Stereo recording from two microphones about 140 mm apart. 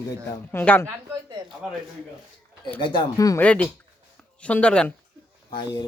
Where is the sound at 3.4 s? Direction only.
10° left (ahead or behind).